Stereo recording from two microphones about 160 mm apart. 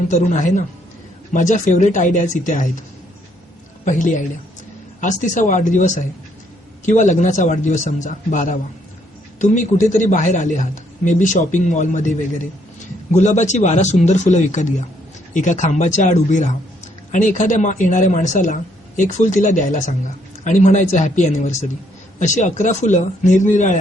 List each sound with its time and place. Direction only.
0.1 s speech: 50° left (ahead or behind)
3.8 s speech: 50° left (ahead or behind)
13.1 s speech: 45° left (ahead or behind)